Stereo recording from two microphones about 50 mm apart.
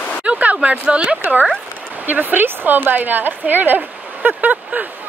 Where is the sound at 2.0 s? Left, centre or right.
Right.